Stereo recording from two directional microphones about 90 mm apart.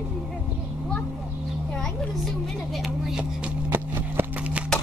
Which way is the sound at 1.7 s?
5° left (ahead or behind).